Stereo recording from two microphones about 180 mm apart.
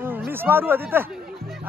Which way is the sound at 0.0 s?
10° right (ahead or behind).